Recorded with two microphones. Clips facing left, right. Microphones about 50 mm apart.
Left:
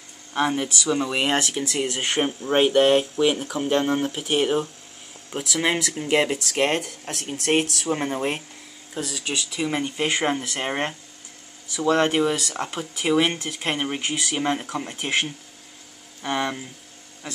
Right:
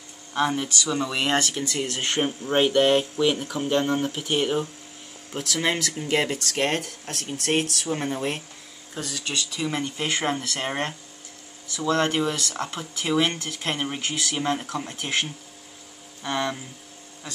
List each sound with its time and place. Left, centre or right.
0.3 s speech: centre
8.9 s speech: centre